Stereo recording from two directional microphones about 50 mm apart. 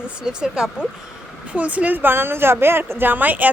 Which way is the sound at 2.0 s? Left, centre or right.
Right.